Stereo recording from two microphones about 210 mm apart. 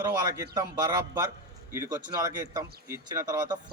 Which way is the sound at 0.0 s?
15° right (ahead or behind).